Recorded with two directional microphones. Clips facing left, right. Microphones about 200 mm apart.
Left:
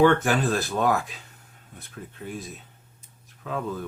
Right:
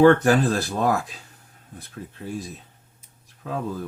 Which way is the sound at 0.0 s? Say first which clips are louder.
Right 4 dB; 40° right (ahead or behind).